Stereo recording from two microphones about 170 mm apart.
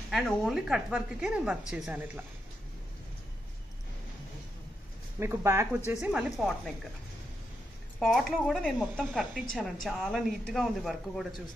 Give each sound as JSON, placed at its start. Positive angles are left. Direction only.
{"t": 0.1, "sound": "speech", "side_deg": 0}
{"t": 5.2, "sound": "speech", "side_deg": -15}
{"t": 5.9, "sound": "speech", "side_deg": -5}
{"t": 8.0, "sound": "speech", "side_deg": 0}